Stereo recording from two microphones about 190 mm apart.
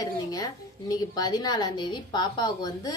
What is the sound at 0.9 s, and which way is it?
A woman's voice, 20° left (ahead or behind).